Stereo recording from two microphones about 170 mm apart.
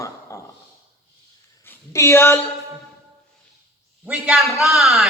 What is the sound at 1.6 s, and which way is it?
Speech, 15° left (ahead or behind).